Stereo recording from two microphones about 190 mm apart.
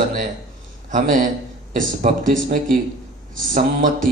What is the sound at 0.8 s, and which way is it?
A man's voice, 40° right (ahead or behind).